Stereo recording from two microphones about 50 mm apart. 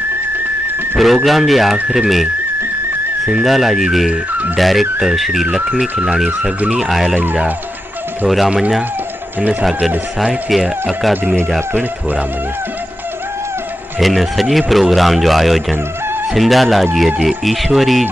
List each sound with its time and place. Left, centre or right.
0.9 s speech: centre
3.4 s speech: centre
5.7 s speech: centre
6.8 s speech: centre
9.4 s speech: right
9.7 s speech: centre
13.9 s speech: centre